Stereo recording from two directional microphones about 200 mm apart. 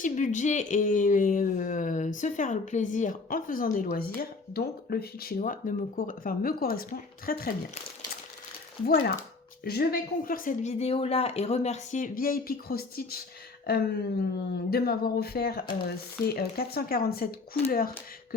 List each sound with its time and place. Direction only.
0.0 s speech: 40° left (ahead or behind)
8.9 s speech: 55° left (ahead or behind)